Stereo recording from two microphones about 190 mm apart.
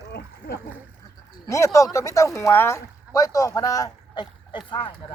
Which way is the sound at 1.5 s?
15° left (ahead or behind).